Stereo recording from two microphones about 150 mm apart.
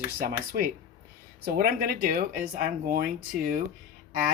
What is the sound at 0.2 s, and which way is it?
Speech, 85° right.